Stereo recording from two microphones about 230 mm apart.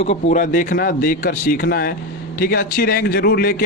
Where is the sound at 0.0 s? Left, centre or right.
Left.